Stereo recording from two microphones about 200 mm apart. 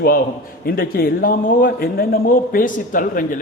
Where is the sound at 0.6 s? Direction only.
50° left (ahead or behind).